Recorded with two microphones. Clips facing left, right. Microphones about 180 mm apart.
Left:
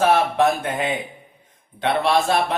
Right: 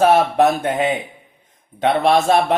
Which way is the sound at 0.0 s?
45° right (ahead or behind).